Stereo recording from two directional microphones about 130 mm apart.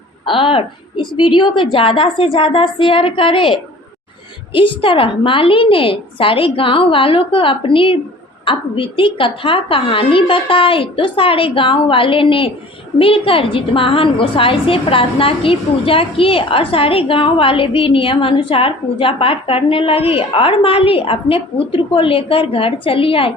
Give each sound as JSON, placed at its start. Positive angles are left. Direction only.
{"t": 0.3, "sound": "a woman's voice", "side_deg": 40}